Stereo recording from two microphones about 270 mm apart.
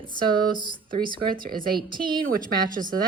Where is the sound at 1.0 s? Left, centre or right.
Right.